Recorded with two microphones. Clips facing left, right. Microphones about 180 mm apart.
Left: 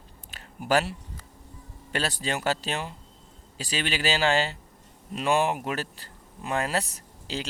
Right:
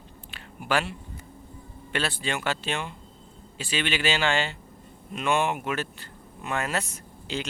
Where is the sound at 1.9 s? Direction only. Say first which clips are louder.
Even; 40° left (ahead or behind).